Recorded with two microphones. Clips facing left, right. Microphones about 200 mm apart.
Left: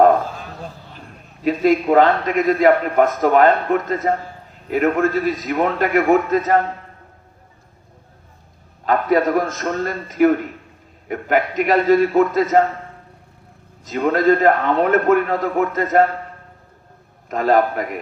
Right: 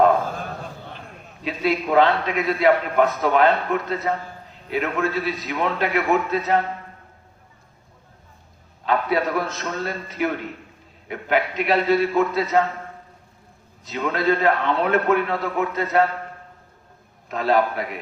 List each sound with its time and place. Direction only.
1.5 s a man's voice: 45° left (ahead or behind)
8.9 s a man's voice: 45° left (ahead or behind)
13.8 s a man's voice: 45° left (ahead or behind)
17.2 s a man's voice: 45° left (ahead or behind)